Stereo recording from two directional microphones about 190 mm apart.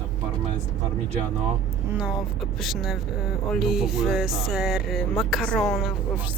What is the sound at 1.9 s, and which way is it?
Music, 5° right (ahead or behind).